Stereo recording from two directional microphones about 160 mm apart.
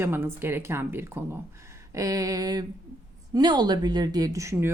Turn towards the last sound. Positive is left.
turn(degrees=-20)  # may be behind; listen again after turning